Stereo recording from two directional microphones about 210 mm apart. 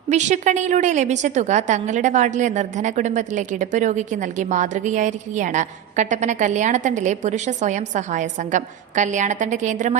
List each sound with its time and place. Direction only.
0.1 s a woman's voice: 35° right (ahead or behind)